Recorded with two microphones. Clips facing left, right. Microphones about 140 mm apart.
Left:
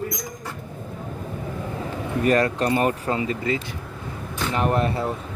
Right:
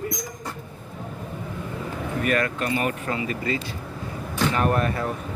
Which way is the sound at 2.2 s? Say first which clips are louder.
Left 5 dB; 35° left (ahead or behind).